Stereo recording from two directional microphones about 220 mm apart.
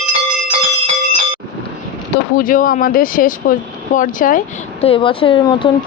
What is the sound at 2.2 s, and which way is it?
Speech, 40° left (ahead or behind).